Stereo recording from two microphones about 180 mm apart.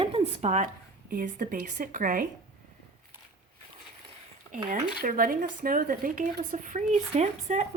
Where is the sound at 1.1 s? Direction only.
50° right (ahead or behind).